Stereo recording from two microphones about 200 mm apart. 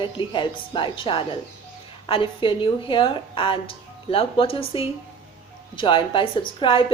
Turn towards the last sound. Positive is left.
turn(degrees=25)  # may be behind; listen again after turning